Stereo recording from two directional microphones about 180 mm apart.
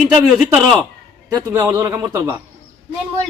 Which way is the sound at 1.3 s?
20° right (ahead or behind).